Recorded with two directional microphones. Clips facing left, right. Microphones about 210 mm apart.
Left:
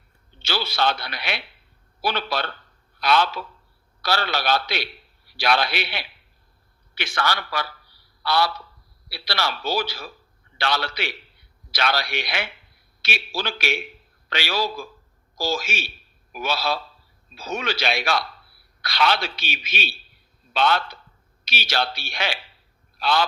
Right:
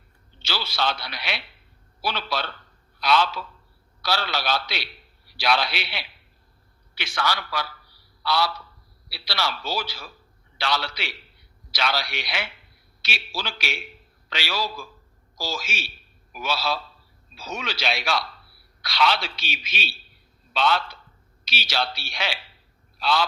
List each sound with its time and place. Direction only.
0.4 s a man's voice: 55° left (ahead or behind)
8.2 s a sound: 55° left (ahead or behind)
9.0 s a man's voice: 55° left (ahead or behind)